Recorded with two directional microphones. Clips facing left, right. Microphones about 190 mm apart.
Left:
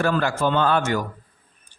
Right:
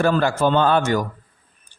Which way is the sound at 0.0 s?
30° right (ahead or behind).